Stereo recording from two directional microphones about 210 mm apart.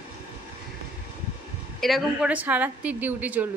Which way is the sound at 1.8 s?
Centre (ahead or behind).